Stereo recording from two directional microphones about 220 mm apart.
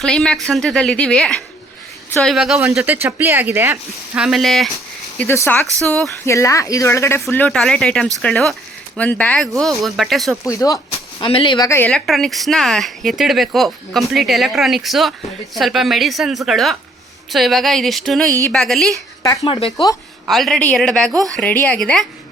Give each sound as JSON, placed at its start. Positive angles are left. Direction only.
{"t": 0.0, "sound": "speech", "side_deg": 0}
{"t": 10.4, "sound": "speech", "side_deg": 15}
{"t": 19.7, "sound": "speech", "side_deg": 15}
{"t": 20.2, "sound": "speech", "side_deg": 0}